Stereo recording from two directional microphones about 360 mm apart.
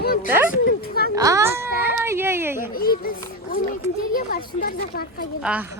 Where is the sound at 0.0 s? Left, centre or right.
Left.